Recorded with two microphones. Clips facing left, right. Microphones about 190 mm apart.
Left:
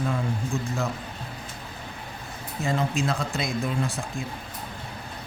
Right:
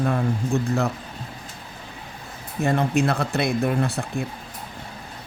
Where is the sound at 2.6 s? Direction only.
60° right (ahead or behind).